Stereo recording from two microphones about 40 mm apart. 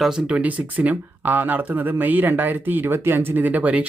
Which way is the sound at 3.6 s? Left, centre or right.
Right.